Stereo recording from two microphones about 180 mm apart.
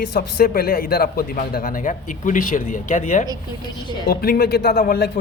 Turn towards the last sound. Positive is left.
turn(degrees=60)  # may be behind; listen again after turning